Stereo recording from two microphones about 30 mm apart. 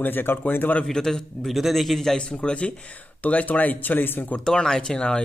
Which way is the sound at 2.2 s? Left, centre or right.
Left.